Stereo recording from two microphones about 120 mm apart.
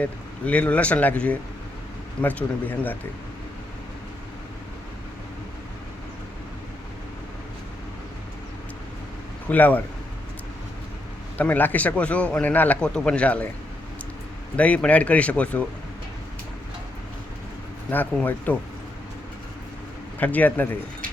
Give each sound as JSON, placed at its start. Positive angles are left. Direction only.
{"t": 0.0, "sound": "a man's voice", "side_deg": 10}
{"t": 9.5, "sound": "a man's voice", "side_deg": 15}
{"t": 11.3, "sound": "a man's voice", "side_deg": 15}
{"t": 14.5, "sound": "a man's voice", "side_deg": 10}
{"t": 17.9, "sound": "a man's voice", "side_deg": 15}
{"t": 20.1, "sound": "a man's voice", "side_deg": 15}